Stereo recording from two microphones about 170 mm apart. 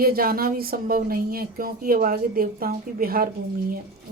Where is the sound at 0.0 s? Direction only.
60° right (ahead or behind).